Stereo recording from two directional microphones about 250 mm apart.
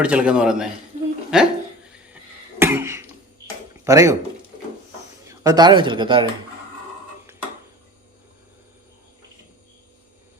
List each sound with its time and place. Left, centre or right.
0.0 s a man's voice: centre
2.6 s cough: centre
3.8 s speech: centre
5.3 s speech: centre